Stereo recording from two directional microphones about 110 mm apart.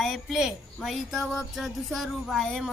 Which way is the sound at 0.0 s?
Centre (ahead or behind).